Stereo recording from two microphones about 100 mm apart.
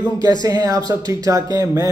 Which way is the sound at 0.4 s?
40° right (ahead or behind).